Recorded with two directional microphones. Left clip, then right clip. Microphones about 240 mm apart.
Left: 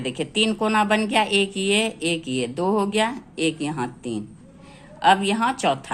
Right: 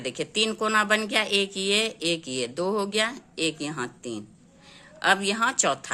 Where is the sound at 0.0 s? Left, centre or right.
Right.